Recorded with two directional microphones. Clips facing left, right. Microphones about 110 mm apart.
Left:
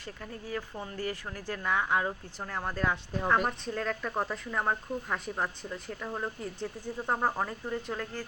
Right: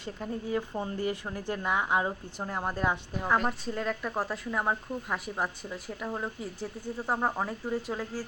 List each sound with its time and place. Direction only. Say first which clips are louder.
0.0 s speech: right 6 dB; 20° right (ahead or behind)
3.2 s speech: left 2 dB; centre (ahead or behind)